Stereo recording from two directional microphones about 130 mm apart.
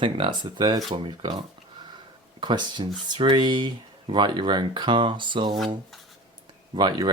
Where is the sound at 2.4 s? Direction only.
35° right (ahead or behind).